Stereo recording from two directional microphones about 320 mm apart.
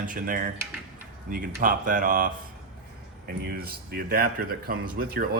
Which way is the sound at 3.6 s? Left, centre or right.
Right.